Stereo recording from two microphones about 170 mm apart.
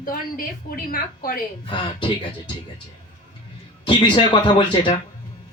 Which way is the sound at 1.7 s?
25° left (ahead or behind).